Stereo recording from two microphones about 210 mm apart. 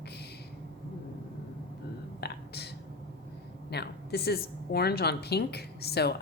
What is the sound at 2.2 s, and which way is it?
Whispering, 50° left (ahead or behind).